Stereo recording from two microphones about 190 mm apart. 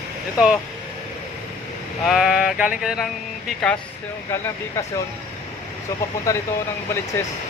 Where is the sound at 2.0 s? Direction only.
Centre (ahead or behind).